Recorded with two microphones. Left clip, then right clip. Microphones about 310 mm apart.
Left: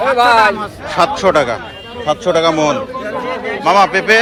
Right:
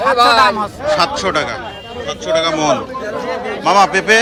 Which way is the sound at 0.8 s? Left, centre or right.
Centre.